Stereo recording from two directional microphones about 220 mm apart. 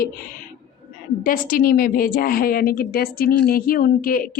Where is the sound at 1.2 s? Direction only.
40° left (ahead or behind).